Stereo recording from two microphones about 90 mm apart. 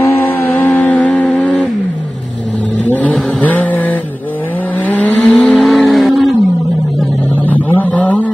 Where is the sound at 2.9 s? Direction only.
15° left (ahead or behind).